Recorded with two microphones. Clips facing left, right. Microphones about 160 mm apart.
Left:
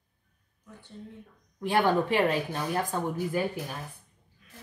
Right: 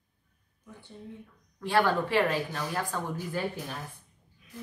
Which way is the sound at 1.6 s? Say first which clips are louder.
Left 1 dB; 20° left (ahead or behind).